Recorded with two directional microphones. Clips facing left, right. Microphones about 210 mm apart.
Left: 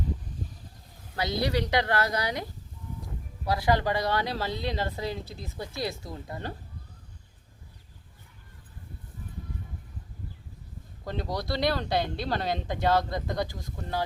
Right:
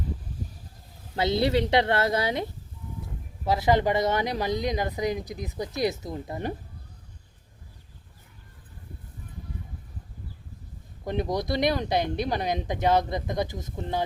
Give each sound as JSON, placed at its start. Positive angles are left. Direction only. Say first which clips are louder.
{"t": 1.1, "sound": "speech", "louder": "right 5 dB", "side_deg": -25}
{"t": 11.0, "sound": "speech", "louder": "right 5 dB", "side_deg": -20}